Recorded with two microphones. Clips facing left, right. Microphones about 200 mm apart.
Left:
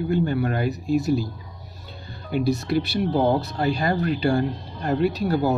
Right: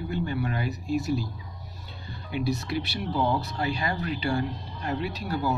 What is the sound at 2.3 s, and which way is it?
Speech, 45° left (ahead or behind).